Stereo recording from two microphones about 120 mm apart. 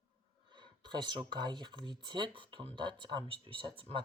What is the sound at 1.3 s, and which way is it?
Speech, 40° right (ahead or behind).